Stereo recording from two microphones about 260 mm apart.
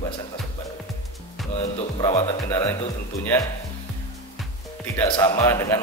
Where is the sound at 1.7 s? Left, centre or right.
Left.